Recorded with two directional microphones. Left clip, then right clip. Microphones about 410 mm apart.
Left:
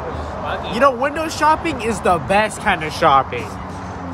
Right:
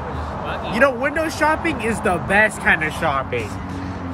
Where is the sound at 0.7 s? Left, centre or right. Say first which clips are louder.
Left 1 dB; centre.